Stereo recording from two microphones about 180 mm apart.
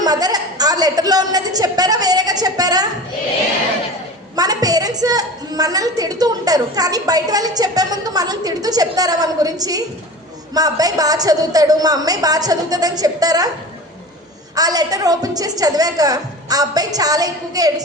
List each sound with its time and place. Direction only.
0.0 s a woman's voice: 20° right (ahead or behind)
4.4 s a woman's voice: 20° right (ahead or behind)
14.5 s a woman's voice: 20° right (ahead or behind)